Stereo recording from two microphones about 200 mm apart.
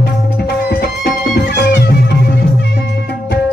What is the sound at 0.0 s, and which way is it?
Music, 55° left (ahead or behind).